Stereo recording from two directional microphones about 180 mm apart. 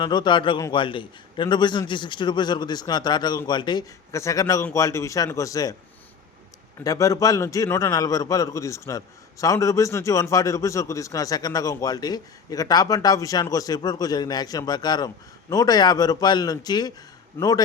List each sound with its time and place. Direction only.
0.0 s a man's voice: 25° left (ahead or behind)
6.8 s a man's voice: 20° left (ahead or behind)
17.4 s speech: 10° left (ahead or behind)